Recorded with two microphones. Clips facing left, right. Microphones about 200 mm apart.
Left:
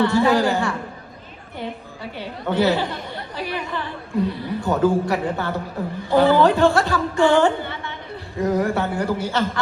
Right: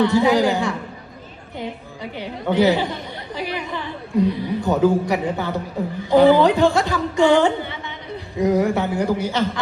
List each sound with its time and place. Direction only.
0.0 s a woman's voice: 15° right (ahead or behind)